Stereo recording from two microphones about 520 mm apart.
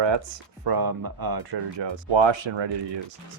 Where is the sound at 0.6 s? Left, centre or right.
Right.